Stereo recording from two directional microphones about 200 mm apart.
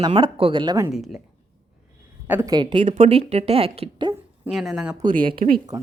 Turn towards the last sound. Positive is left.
turn(degrees=-20)  # may be behind; listen again after turning